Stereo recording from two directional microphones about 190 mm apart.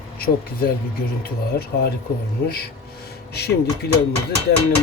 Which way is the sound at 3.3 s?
55° left (ahead or behind).